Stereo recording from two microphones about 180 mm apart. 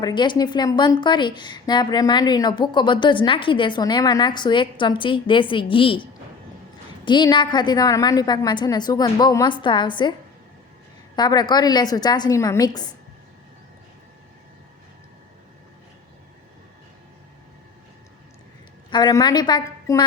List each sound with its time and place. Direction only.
0.0 s a woman's voice: 25° left (ahead or behind)
11.2 s a woman's voice: 25° left (ahead or behind)
18.9 s a woman's voice: 25° left (ahead or behind)